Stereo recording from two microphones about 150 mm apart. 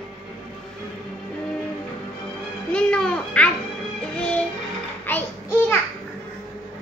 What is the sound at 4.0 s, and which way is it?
Music, 10° left (ahead or behind).